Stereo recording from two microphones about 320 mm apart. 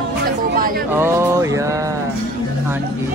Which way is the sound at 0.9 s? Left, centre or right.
Centre.